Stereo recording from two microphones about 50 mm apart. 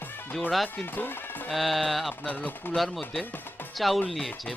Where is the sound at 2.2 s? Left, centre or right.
Left.